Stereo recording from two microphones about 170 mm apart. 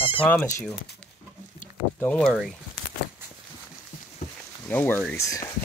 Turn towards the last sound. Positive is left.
turn(degrees=20)  # may be behind; listen again after turning